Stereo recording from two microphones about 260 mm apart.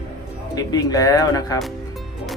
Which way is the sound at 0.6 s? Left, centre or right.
Centre.